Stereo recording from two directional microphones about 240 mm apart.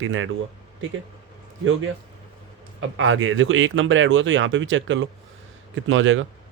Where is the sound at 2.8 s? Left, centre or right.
Right.